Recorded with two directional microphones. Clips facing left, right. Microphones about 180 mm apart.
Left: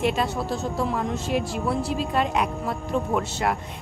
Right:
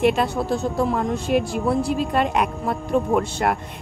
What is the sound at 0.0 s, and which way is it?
A woman's voice, 60° right (ahead or behind).